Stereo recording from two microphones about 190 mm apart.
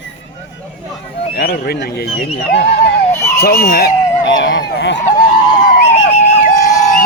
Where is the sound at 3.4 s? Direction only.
55° left (ahead or behind).